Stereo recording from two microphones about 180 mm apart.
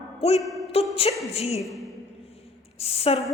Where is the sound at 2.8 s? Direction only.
35° left (ahead or behind).